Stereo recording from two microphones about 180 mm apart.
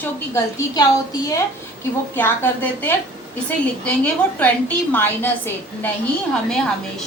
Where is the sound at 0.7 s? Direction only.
20° left (ahead or behind).